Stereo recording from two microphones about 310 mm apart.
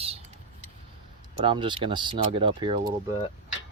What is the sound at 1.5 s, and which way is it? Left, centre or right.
Speech, centre.